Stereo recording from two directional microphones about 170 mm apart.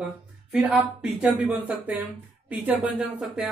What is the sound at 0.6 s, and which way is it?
Speech, 5° right (ahead or behind).